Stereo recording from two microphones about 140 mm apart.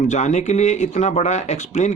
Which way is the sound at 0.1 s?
55° left (ahead or behind).